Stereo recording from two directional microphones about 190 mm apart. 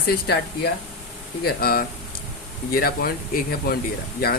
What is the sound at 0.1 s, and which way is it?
Speech, 60° left (ahead or behind).